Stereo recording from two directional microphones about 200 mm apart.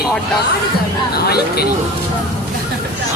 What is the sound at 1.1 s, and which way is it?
Speech, 50° left (ahead or behind).